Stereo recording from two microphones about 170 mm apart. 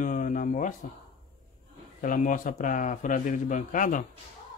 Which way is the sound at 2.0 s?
50° left (ahead or behind).